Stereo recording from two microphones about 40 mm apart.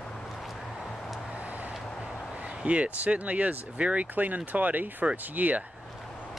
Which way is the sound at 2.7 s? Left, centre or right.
Right.